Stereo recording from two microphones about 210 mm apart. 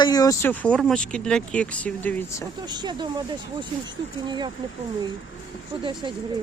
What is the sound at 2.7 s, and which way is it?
Speech, 20° right (ahead or behind).